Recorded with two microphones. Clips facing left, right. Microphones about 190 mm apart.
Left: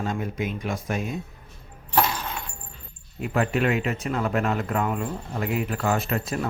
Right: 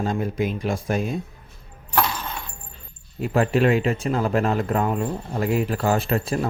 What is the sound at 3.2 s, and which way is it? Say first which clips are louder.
Speech: right 4 dB; 30° right (ahead or behind).